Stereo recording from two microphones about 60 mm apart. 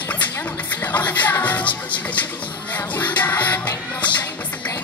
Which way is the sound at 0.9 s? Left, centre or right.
Left.